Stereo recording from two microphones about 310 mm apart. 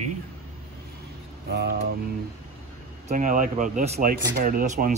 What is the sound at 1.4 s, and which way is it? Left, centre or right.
Speech, right.